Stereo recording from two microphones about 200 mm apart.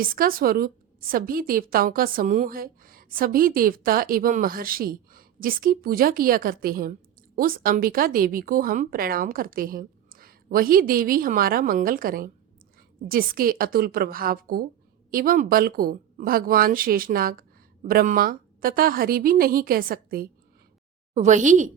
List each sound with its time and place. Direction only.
0.0 s a woman's voice: 45° right (ahead or behind)
21.1 s a woman's voice: 35° right (ahead or behind)